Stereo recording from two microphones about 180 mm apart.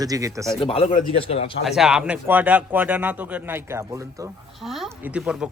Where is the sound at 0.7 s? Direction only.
35° left (ahead or behind).